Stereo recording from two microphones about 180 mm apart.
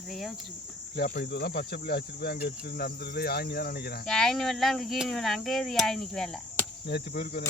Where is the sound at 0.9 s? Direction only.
60° left (ahead or behind).